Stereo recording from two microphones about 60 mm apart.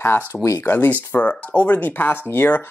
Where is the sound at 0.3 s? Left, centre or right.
Left.